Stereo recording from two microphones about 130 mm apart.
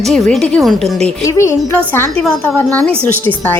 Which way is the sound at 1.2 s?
20° left (ahead or behind).